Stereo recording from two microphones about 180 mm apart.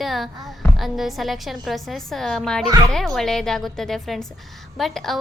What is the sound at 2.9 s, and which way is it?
Speech, centre (ahead or behind).